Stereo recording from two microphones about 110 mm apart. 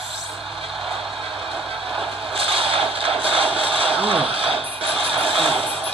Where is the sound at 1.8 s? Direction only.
55° right (ahead or behind).